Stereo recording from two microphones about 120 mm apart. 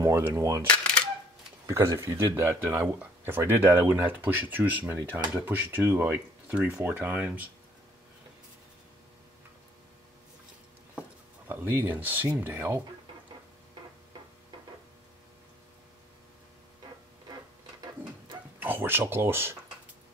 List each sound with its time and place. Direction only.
0.0 s speech: 25° right (ahead or behind)
0.7 s a sound: 10° left (ahead or behind)
1.7 s speech: 25° right (ahead or behind)
11.0 s a sound: 15° right (ahead or behind)
12.4 s speech: 15° right (ahead or behind)
18.6 s speech: 15° right (ahead or behind)